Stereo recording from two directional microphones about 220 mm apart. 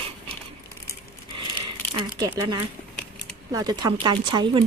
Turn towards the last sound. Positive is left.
turn(degrees=-20)  # may be behind; listen again after turning